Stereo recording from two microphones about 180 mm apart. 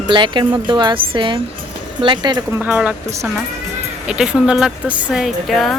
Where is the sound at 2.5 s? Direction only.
10° right (ahead or behind).